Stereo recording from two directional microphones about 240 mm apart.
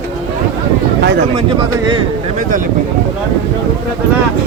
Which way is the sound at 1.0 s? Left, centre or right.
Right.